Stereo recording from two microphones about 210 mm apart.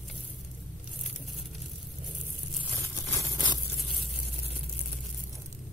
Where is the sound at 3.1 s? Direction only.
15° left (ahead or behind).